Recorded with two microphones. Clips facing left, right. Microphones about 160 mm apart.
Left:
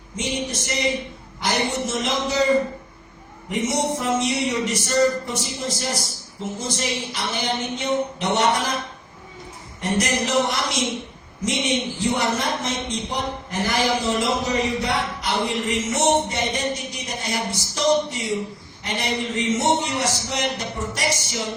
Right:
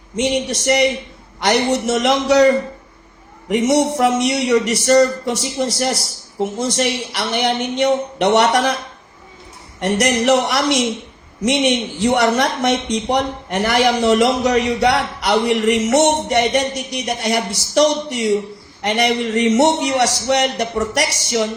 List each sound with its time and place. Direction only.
0.2 s a man's voice: 80° right
3.5 s a man's voice: 75° right (ahead or behind)
9.8 s a man's voice: 75° right (ahead or behind)